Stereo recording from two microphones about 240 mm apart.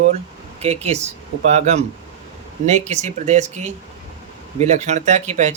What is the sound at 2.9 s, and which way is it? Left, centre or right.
Speech, right.